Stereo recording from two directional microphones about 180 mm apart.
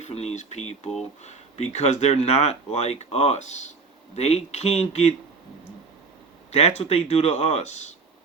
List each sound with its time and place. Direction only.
0.0 s speech: 35° left (ahead or behind)
6.5 s speech: 35° left (ahead or behind)